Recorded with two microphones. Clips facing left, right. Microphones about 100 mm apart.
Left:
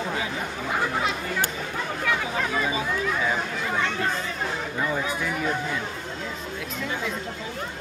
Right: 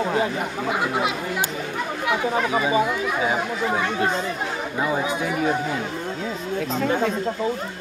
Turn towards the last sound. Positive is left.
turn(degrees=-50)  # may be behind; listen again after turning